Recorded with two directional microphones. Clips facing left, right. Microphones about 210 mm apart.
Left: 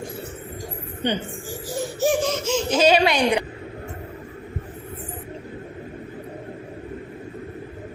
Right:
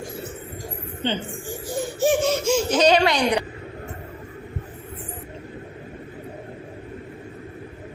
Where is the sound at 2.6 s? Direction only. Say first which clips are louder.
Left 1 dB; 10° left (ahead or behind).